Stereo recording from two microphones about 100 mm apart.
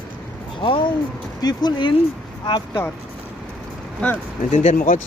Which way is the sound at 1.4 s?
45° left (ahead or behind).